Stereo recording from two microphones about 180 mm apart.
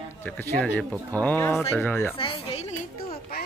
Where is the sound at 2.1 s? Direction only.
30° left (ahead or behind).